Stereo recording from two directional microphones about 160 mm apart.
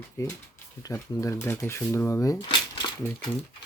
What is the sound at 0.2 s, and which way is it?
Speech, 20° left (ahead or behind).